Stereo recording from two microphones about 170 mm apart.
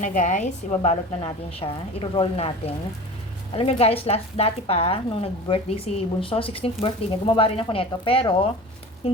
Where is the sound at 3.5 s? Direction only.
35° left (ahead or behind).